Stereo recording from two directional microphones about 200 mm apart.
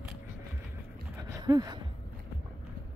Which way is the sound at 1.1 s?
20° right (ahead or behind).